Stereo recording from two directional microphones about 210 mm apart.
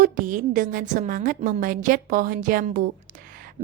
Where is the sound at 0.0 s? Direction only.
40° right (ahead or behind).